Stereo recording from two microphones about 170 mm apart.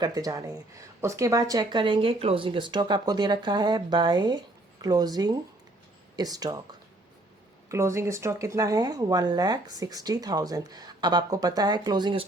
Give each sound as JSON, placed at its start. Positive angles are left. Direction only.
{"t": 0.0, "sound": "speech", "side_deg": -20}